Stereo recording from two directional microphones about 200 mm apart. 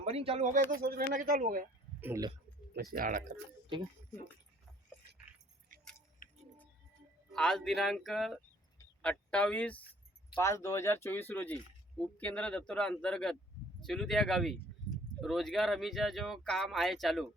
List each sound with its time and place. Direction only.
0.0 s speech: 30° right (ahead or behind)
0.8 s speech: 45° right (ahead or behind)
2.0 s speech: 15° right (ahead or behind)
2.7 s speech: 45° right (ahead or behind)
7.3 s speech: centre (ahead or behind)